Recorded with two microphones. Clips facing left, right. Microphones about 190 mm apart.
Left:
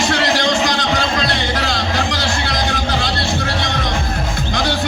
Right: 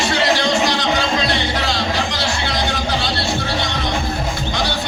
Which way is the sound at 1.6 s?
45° left (ahead or behind).